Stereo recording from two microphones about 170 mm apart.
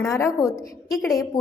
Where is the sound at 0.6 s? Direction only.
Centre (ahead or behind).